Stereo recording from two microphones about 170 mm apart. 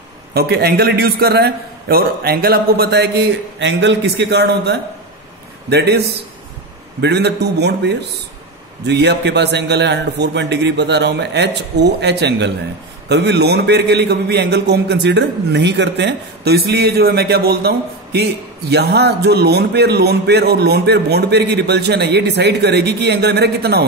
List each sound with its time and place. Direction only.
0.3 s a man's voice: 70° right (ahead or behind)